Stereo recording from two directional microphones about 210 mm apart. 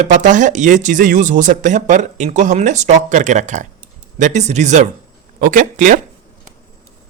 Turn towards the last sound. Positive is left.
turn(degrees=-40)  # may be behind; listen again after turning